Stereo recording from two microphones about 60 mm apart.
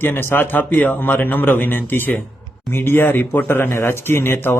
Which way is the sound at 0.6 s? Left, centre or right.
Left.